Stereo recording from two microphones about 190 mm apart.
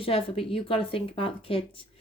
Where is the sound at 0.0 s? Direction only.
30° left (ahead or behind).